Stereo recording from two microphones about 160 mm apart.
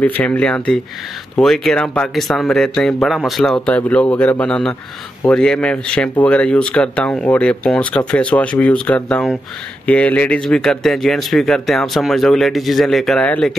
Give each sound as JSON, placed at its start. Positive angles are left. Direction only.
{"t": 0.2, "sound": "speech", "side_deg": 10}